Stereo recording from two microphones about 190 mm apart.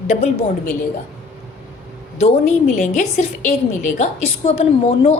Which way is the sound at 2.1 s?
35° left (ahead or behind).